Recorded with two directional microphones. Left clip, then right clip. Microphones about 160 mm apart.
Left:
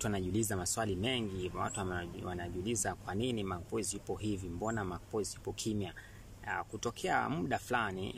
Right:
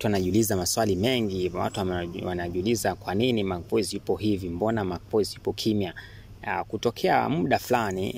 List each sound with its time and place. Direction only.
0.0 s speech: 35° right (ahead or behind)